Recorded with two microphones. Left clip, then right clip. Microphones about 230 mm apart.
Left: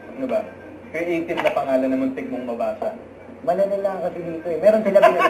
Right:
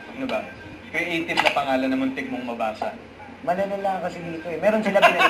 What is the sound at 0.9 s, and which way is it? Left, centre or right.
A man's voice, right.